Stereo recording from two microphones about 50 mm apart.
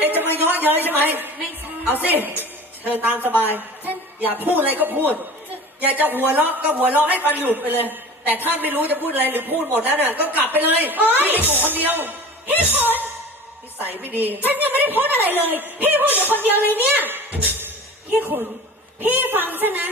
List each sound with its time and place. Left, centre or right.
0.0 s a sound: right
0.9 s a woman's voice: right
18.9 s a woman's voice: right